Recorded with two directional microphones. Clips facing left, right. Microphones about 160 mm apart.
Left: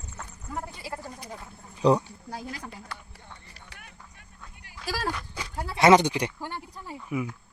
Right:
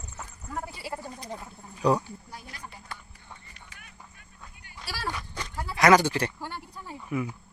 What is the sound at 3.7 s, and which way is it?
Vehicle, 70° left (ahead or behind).